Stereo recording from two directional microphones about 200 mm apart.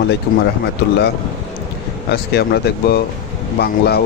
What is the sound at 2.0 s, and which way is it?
Speech, 55° left (ahead or behind).